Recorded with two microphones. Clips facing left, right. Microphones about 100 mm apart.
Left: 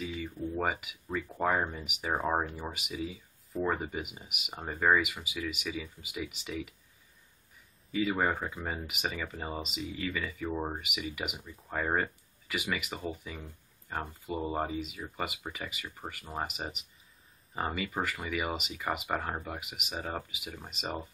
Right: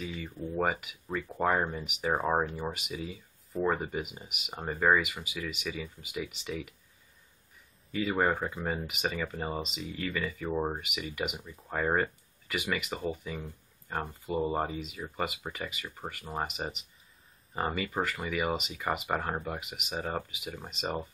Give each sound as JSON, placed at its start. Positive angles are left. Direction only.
{"t": 0.0, "sound": "speech", "side_deg": 0}
{"t": 7.9, "sound": "speech", "side_deg": 0}
{"t": 10.5, "sound": "speech", "side_deg": -10}
{"t": 10.8, "sound": "speech", "side_deg": 0}